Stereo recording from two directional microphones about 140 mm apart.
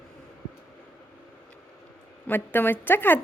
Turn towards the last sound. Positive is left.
turn(degrees=15)  # may be behind; listen again after turning